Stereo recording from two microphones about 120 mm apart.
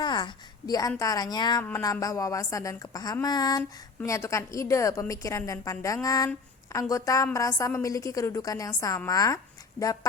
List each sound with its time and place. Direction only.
0.0 s a woman's voice: 40° left (ahead or behind)